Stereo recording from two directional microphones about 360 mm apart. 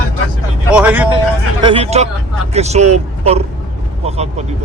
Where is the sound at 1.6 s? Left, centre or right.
Centre.